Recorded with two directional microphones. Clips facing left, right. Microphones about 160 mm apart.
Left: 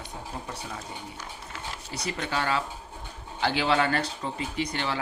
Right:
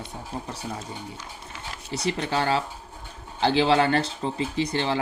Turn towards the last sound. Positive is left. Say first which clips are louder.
# right 5 dB
turn(degrees=-25)  # may be behind; listen again after turning